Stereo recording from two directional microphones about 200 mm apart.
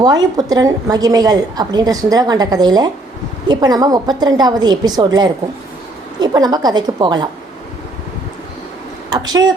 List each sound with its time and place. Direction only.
0.0 s a woman's voice: 20° right (ahead or behind)
9.0 s a woman's voice: 20° right (ahead or behind)